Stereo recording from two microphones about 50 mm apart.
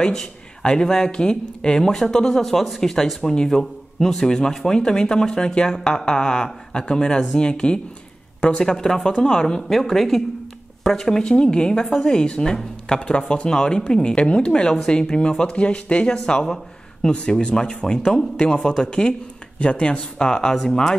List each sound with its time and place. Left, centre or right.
0.0 s speech: centre